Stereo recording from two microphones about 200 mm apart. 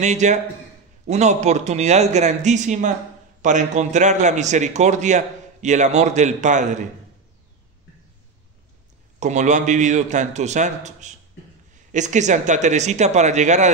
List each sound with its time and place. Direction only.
0.0 s a man's voice: 35° right (ahead or behind)
9.2 s a man's voice: 35° right (ahead or behind)